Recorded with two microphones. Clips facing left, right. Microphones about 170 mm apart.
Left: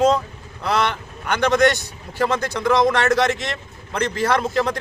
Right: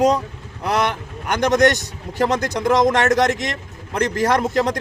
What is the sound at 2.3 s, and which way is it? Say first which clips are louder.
Speech: right 2 dB; 45° right (ahead or behind).